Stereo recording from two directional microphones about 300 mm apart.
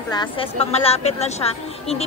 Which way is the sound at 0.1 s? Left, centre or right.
Centre.